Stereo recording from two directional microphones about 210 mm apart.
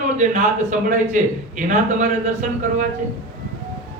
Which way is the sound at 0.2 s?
35° right (ahead or behind).